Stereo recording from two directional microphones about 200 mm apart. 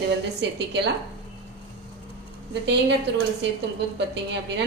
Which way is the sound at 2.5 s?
60° right (ahead or behind).